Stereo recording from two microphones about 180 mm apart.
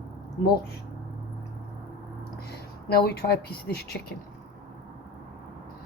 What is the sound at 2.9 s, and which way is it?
Speech, 60° left (ahead or behind).